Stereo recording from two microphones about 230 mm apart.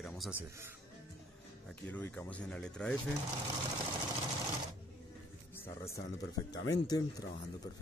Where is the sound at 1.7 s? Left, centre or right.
Centre.